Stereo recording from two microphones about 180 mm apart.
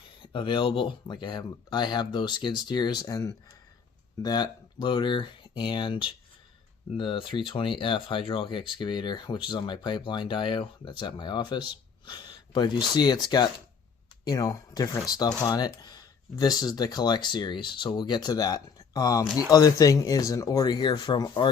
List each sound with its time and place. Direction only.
0.2 s speech: 30° left (ahead or behind)